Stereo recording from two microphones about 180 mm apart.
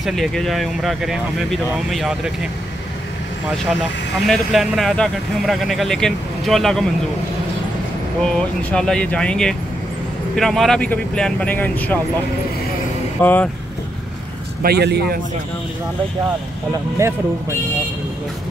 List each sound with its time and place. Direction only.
0.0 s speech: centre (ahead or behind)
4.3 s speech: centre (ahead or behind)
8.2 s speech: 5° left (ahead or behind)
13.2 s speech: 10° left (ahead or behind)
14.6 s a man's voice: 65° right (ahead or behind)